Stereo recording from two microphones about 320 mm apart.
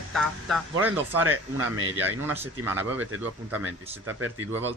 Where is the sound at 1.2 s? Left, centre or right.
Right.